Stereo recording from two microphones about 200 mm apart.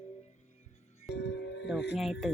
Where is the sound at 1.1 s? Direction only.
60° left (ahead or behind).